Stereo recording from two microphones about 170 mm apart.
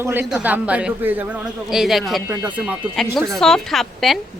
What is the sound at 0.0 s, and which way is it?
A man's voice, 10° right (ahead or behind).